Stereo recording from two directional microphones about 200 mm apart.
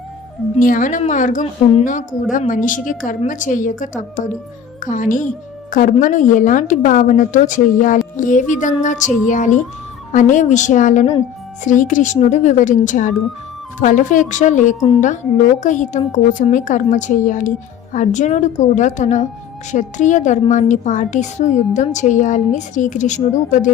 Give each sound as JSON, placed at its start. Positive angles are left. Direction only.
{"t": 0.5, "sound": "a woman's voice", "side_deg": 40}